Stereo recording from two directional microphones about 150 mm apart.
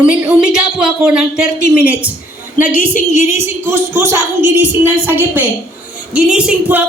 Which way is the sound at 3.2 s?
15° right (ahead or behind).